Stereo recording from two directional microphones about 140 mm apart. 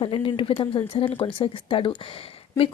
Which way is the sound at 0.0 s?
35° left (ahead or behind).